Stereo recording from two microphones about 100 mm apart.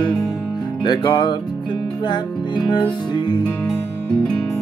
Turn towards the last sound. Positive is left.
turn(degrees=50)  # may be behind; listen again after turning